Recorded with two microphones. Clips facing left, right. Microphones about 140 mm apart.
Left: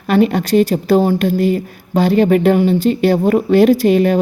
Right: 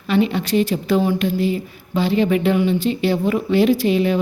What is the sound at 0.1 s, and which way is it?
Speech, 50° left (ahead or behind).